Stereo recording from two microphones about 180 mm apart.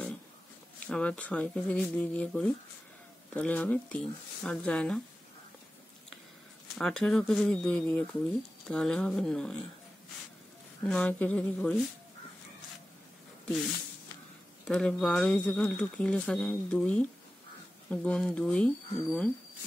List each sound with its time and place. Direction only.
0.7 s speech: 5° left (ahead or behind)
6.8 s speech: 5° left (ahead or behind)
10.9 s speech: 5° left (ahead or behind)
14.7 s speech: 5° left (ahead or behind)